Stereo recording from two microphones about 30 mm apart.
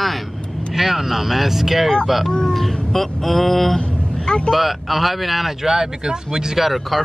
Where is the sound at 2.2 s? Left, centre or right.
Left.